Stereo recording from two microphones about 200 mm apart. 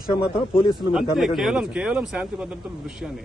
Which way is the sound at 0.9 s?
Centre (ahead or behind).